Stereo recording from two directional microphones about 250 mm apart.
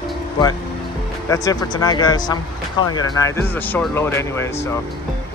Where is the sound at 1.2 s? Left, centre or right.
Centre.